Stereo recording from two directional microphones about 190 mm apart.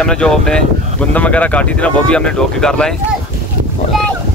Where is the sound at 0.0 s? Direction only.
5° left (ahead or behind).